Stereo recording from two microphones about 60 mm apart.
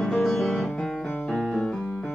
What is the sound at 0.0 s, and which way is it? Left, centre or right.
Music, centre.